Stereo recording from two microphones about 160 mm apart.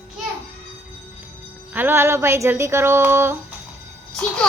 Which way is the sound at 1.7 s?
15° right (ahead or behind).